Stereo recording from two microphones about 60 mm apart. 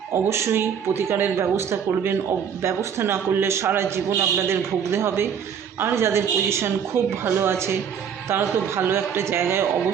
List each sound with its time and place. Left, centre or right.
0.3 s a woman's voice: right